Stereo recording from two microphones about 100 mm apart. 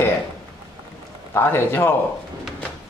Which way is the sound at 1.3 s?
20° left (ahead or behind).